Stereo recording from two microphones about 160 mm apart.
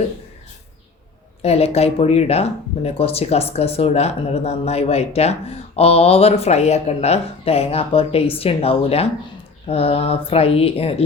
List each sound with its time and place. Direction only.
1.4 s speech: 40° left (ahead or behind)